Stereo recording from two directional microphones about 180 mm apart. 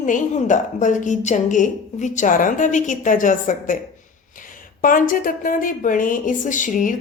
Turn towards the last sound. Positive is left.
turn(degrees=45)  # may be behind; listen again after turning